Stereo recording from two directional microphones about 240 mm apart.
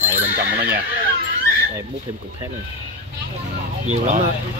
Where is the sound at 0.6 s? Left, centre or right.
Right.